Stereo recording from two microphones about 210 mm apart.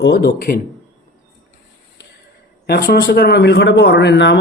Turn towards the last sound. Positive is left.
turn(degrees=55)  # may be behind; listen again after turning